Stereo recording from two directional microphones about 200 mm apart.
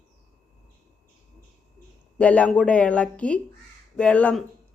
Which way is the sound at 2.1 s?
5° left (ahead or behind).